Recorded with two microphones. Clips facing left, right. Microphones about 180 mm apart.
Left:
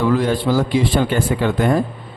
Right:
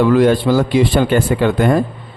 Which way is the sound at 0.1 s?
70° right (ahead or behind).